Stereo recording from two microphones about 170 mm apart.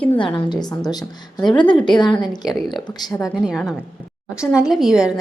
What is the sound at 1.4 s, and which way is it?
Speech, 25° left (ahead or behind).